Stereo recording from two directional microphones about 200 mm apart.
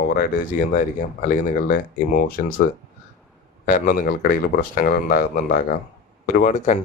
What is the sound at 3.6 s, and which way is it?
Speech, 45° left (ahead or behind).